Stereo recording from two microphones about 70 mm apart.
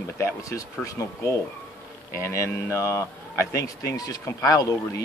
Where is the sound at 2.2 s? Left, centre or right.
Left.